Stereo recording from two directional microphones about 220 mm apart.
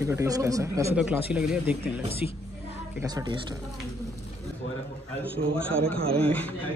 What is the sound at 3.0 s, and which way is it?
Speech, 15° right (ahead or behind).